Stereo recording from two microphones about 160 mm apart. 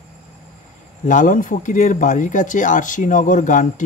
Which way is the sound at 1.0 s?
55° left (ahead or behind).